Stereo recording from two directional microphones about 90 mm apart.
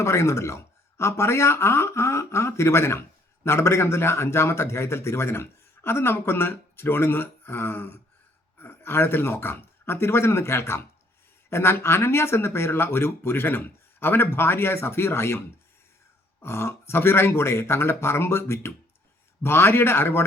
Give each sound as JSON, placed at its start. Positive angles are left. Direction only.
{"t": 0.0, "sound": "a man's voice", "side_deg": 35}
{"t": 16.4, "sound": "a man's voice", "side_deg": 30}